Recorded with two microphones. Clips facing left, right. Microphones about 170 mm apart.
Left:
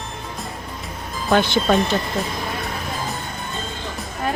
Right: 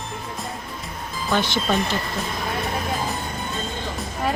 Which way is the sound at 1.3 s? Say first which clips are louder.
Left 5 dB; 60° left (ahead or behind).